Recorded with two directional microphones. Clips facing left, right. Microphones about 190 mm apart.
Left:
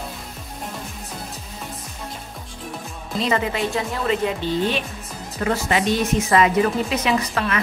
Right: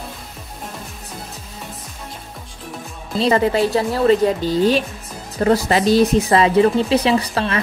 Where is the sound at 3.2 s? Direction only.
35° right (ahead or behind).